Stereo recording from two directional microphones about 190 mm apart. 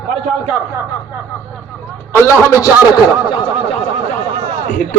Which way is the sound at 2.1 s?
15° left (ahead or behind).